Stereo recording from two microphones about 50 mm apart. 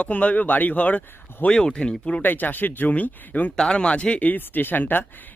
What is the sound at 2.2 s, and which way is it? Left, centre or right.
Speech, left.